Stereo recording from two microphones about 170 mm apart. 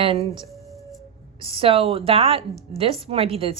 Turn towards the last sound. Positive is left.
turn(degrees=-35)  # may be behind; listen again after turning